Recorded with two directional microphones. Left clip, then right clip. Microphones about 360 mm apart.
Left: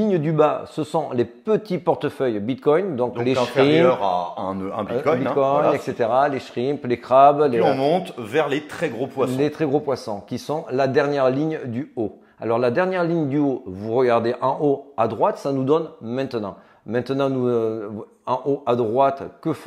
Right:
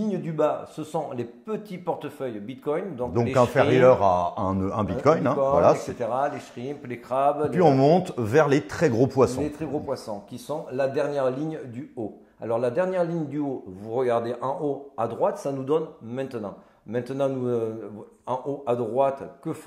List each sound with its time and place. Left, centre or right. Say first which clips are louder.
0.0 s a man's voice: left 7 dB; left
3.3 s a man's voice: left 2 dB; right
4.5 s speech: left 1 dB; centre
5.9 s a man's voice: left 7 dB; left
7.5 s speech: even; right
9.4 s a man's voice: left 9 dB; left